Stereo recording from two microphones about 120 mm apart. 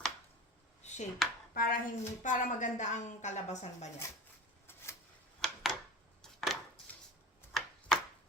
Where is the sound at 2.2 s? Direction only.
90° left; by 3.8 s 70° left (ahead or behind).